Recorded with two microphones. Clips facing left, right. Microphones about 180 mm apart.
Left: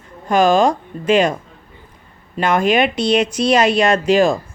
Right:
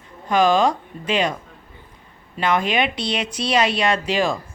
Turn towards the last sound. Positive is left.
turn(degrees=45)  # may be behind; listen again after turning